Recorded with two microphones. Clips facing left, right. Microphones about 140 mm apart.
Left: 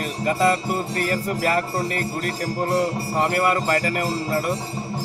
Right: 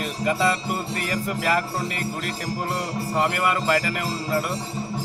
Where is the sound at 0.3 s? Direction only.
45° left (ahead or behind).